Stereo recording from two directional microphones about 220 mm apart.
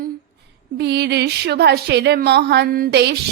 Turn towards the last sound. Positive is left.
turn(degrees=-50)  # may be behind; listen again after turning